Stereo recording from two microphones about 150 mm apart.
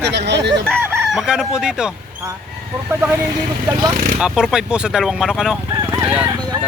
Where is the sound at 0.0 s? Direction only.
90° right.